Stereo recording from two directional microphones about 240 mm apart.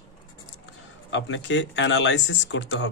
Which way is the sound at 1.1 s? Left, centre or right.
Left.